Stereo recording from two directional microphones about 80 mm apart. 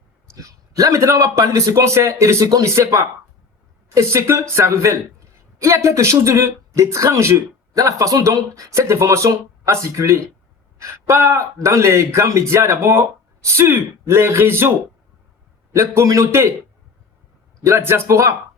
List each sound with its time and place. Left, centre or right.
0.3 s speech: right
15.7 s speech: right
17.6 s speech: right